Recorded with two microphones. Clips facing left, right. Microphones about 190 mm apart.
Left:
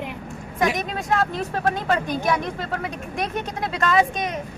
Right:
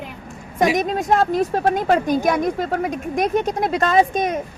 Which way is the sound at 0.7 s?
40° right (ahead or behind).